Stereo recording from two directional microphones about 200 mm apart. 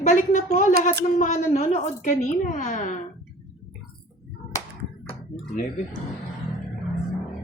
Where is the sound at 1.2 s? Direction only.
35° left (ahead or behind).